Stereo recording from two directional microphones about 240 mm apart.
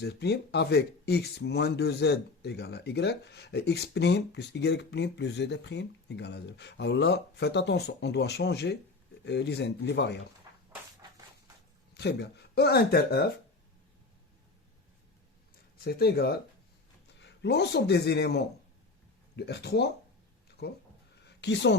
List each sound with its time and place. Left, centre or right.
0.0 s speech: left
11.9 s speech: left
15.8 s a man's voice: left
21.2 s a sound: left